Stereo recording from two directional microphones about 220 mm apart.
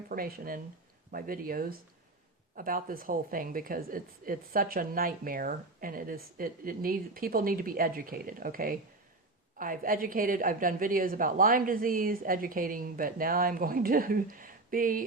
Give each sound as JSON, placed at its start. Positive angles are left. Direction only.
{"t": 0.1, "sound": "a woman's voice", "side_deg": -45}